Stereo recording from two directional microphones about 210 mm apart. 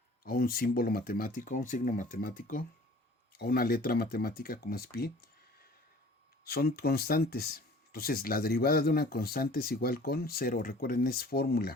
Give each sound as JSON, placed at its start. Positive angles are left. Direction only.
{"t": 0.3, "sound": "speech", "side_deg": 45}
{"t": 6.4, "sound": "speech", "side_deg": 45}